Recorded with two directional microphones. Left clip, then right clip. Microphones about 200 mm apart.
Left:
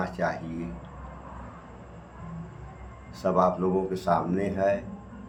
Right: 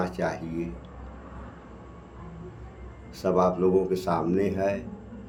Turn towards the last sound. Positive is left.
turn(degrees=-20)  # may be behind; listen again after turning